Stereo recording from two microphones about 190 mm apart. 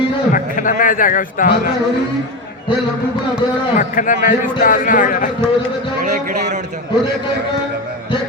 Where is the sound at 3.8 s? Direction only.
45° left (ahead or behind).